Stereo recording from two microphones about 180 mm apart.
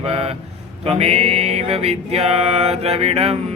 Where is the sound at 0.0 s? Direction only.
30° right (ahead or behind).